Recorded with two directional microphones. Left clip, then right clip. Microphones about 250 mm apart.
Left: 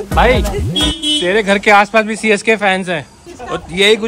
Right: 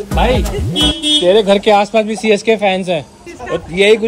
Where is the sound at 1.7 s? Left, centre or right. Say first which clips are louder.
Left 1 dB; left.